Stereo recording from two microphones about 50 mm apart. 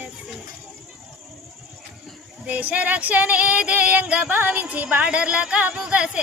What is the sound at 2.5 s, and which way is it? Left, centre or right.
A woman's voice, right.